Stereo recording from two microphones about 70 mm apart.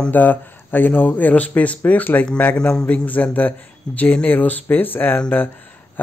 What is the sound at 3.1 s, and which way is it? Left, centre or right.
Speech, left.